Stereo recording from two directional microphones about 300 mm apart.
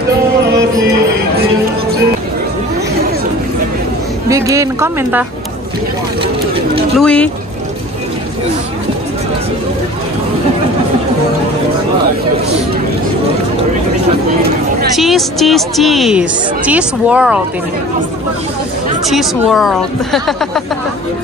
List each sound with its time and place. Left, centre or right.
4.3 s speech: centre
7.0 s a woman's voice: centre
15.0 s a woman's voice: centre
19.0 s a woman's voice: centre